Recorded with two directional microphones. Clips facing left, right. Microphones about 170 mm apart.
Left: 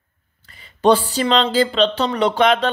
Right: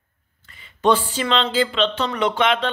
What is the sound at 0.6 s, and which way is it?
Speech, 35° left (ahead or behind).